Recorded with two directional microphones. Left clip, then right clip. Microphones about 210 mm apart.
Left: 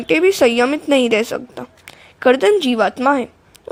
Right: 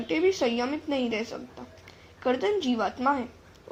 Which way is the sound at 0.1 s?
50° left (ahead or behind).